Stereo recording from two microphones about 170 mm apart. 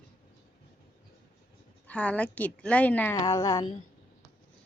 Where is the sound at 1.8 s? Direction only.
10° left (ahead or behind).